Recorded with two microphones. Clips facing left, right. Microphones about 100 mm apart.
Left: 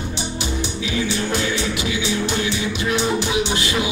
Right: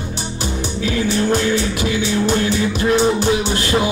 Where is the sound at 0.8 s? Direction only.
40° right (ahead or behind).